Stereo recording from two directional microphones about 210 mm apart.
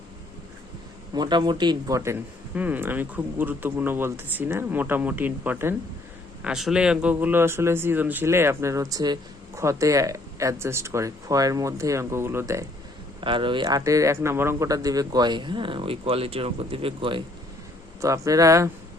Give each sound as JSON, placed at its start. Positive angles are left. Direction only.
{"t": 1.1, "sound": "speech", "side_deg": -20}
{"t": 13.2, "sound": "speech", "side_deg": -25}